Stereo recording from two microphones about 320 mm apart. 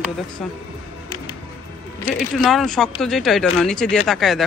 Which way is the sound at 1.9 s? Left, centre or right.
Centre.